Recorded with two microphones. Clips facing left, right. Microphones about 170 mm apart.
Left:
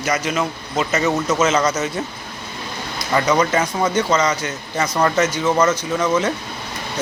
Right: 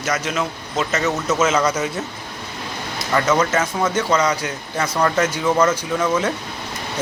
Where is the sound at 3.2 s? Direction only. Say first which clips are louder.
Left 1 dB; 5° right (ahead or behind).